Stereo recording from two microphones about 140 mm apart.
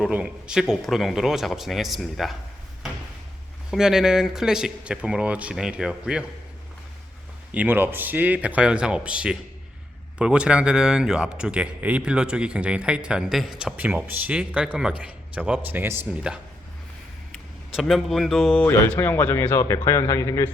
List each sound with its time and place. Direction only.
0.0 s speech: 5° right (ahead or behind)
3.7 s speech: 5° right (ahead or behind)
7.5 s speech: 10° right (ahead or behind)
16.3 s speech: 5° right (ahead or behind)
18.6 s a man's voice: 15° left (ahead or behind)